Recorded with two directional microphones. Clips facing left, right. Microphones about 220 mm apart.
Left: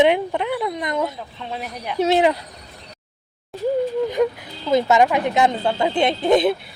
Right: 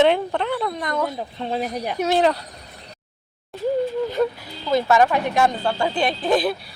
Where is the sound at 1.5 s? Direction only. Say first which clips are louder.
Right 5 dB; 40° right (ahead or behind).